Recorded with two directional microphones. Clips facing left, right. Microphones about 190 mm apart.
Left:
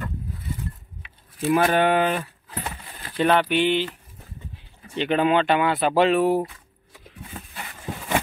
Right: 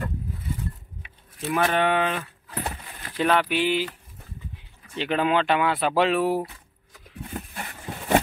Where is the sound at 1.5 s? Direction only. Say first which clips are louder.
Left 3 dB; 5° left (ahead or behind).